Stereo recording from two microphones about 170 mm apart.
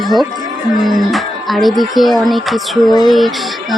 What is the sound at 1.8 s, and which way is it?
Speech, centre (ahead or behind).